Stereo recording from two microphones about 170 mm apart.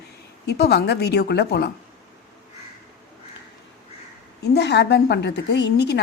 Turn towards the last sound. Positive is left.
turn(degrees=85)